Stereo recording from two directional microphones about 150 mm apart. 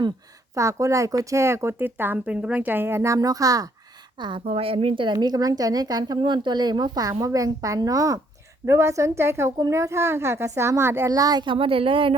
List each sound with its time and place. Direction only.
0.5 s a woman's voice: 20° right (ahead or behind)
4.2 s a woman's voice: 35° right (ahead or behind)
5.1 s a woman's voice: 25° right (ahead or behind)